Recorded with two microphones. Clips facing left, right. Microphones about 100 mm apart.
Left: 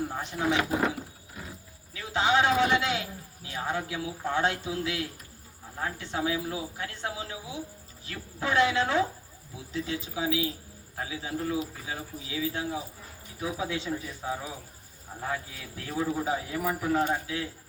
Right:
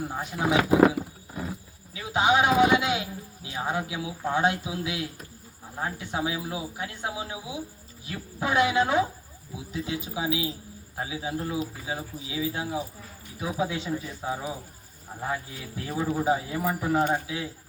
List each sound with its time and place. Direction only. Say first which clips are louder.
0.1 s speech: right 2 dB; 10° right (ahead or behind)
1.9 s a man's voice: right 3 dB; 15° right (ahead or behind)
15.9 s speech: right 3 dB; 15° right (ahead or behind)